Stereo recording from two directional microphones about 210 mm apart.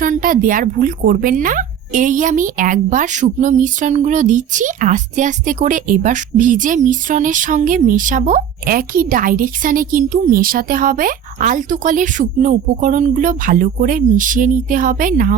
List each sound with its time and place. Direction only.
0.0 s a woman's voice: 40° right (ahead or behind)